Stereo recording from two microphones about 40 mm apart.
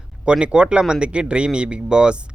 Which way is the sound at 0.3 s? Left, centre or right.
Right.